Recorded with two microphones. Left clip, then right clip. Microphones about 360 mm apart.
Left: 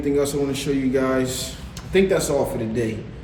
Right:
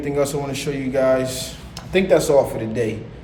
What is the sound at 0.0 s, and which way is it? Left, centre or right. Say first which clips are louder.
A man's voice: even; centre.